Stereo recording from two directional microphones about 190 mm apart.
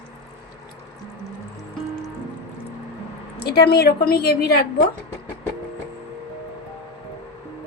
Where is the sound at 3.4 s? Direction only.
55° left (ahead or behind).